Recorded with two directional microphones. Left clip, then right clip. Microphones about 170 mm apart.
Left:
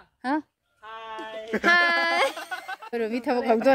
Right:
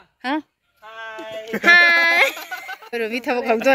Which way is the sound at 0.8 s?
65° right (ahead or behind).